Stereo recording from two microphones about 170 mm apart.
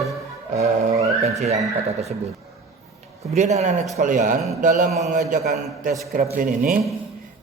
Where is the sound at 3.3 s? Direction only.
45° right (ahead or behind).